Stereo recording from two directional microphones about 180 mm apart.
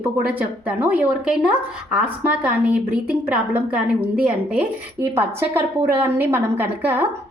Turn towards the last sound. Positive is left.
turn(degrees=-10)  # may be behind; listen again after turning